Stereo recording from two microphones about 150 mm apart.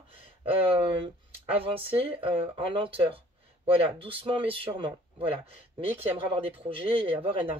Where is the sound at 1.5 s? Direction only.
40° right (ahead or behind).